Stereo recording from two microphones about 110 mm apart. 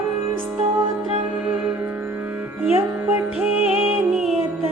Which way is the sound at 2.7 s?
15° right (ahead or behind).